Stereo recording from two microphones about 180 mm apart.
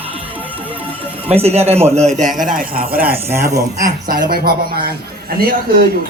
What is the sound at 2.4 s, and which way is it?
Speech, 50° right (ahead or behind).